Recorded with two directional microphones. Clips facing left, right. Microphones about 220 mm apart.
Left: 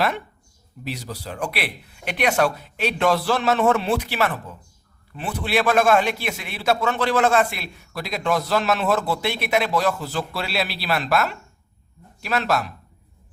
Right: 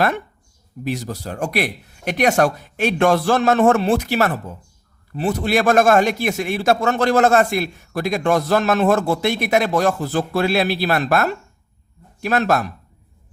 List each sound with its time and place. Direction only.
0.9 s a man's voice: 50° right (ahead or behind)